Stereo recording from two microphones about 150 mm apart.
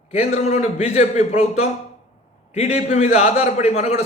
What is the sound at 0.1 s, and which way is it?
A man's voice, 45° left (ahead or behind).